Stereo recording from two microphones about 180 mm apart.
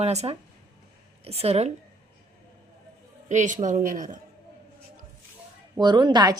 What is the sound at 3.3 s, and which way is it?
Speech, 40° right (ahead or behind).